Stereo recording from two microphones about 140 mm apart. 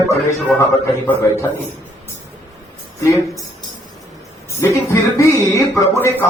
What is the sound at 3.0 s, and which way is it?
Speech, 25° left (ahead or behind).